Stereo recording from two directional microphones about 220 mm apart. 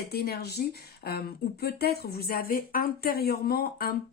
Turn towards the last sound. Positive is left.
turn(degrees=45)  # may be behind; listen again after turning